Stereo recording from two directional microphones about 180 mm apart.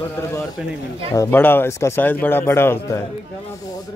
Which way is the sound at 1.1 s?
10° left (ahead or behind).